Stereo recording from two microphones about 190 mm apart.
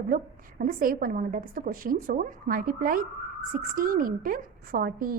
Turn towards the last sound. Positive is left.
turn(degrees=-50)  # may be behind; listen again after turning